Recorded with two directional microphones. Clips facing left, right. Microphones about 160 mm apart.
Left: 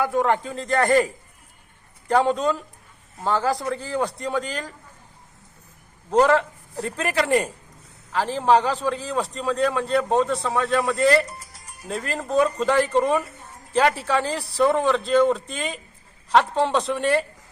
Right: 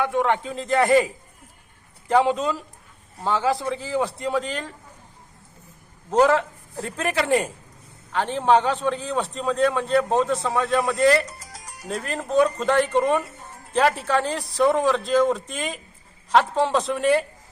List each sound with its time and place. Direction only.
0.0 s a man's voice: centre (ahead or behind)
6.1 s a man's voice: 5° right (ahead or behind)
11.3 s music: 90° right
11.9 s a man's voice: centre (ahead or behind)